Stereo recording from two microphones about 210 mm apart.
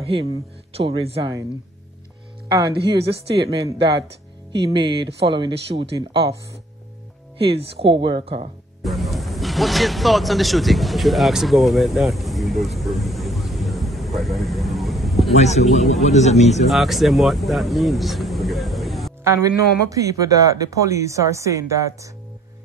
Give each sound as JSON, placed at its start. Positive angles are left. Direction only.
{"t": 0.0, "sound": "speech", "side_deg": -25}
{"t": 4.5, "sound": "speech", "side_deg": -20}
{"t": 7.3, "sound": "speech", "side_deg": -25}
{"t": 8.8, "sound": "speech", "side_deg": 0}
{"t": 15.3, "sound": "a man's voice", "side_deg": 30}
{"t": 16.6, "sound": "speech", "side_deg": 0}
{"t": 19.2, "sound": "speech", "side_deg": -15}